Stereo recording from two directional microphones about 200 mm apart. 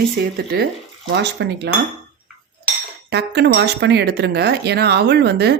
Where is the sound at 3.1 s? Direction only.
55° right (ahead or behind).